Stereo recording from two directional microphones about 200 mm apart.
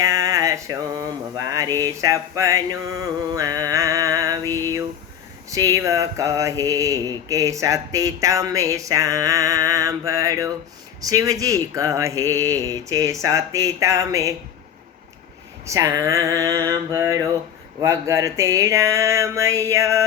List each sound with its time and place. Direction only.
0.0 s a sound: 15° right (ahead or behind)
1.5 s mantra: 20° right (ahead or behind)
15.6 s mantra: 15° right (ahead or behind)